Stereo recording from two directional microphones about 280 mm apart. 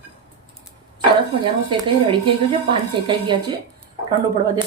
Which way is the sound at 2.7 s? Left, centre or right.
Centre.